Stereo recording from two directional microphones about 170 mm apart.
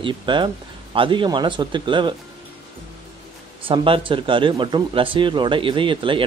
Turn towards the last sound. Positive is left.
turn(degrees=-30)  # may be behind; listen again after turning